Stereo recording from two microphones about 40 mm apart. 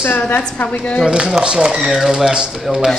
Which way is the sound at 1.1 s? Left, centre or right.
Centre.